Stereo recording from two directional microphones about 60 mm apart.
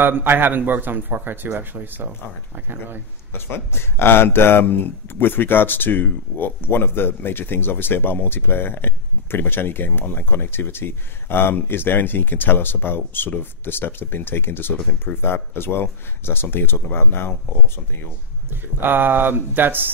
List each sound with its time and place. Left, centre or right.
0.0 s speech: right
3.3 s speech: left
18.5 s speech: right